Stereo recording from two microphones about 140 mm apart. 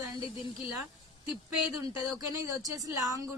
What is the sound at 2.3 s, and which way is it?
Speech, 25° right (ahead or behind).